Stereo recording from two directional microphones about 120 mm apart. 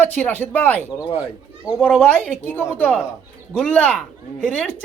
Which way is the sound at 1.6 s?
5° right (ahead or behind).